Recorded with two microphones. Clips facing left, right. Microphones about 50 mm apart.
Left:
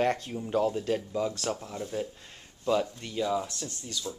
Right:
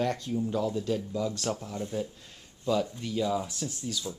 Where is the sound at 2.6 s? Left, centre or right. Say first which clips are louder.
Left 1 dB; left.